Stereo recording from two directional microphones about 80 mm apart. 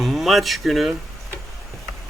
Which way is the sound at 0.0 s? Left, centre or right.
Centre.